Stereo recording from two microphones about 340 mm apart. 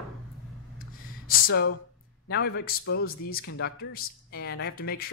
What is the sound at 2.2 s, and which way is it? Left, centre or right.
A man's voice, left.